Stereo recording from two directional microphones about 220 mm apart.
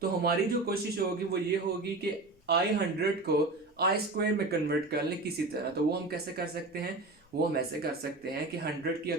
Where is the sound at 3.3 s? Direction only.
45° right (ahead or behind).